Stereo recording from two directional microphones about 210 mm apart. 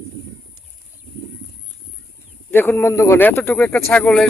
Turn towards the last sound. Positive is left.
turn(degrees=5)  # may be behind; listen again after turning